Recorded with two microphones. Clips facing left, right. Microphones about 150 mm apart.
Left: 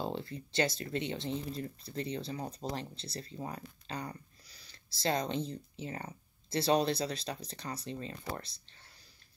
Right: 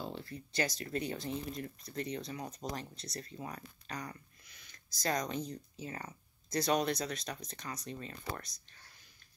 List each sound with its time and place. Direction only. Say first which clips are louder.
0.0 s speech: left 5 dB; 25° left (ahead or behind)